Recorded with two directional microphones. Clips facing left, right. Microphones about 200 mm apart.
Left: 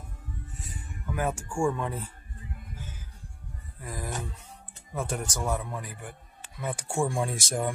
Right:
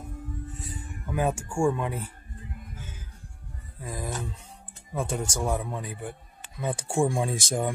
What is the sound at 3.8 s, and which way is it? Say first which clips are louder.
Speech: right 2 dB; 20° right (ahead or behind).